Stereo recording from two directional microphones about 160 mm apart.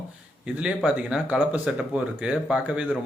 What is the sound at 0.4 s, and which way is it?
A man's voice, 5° right (ahead or behind).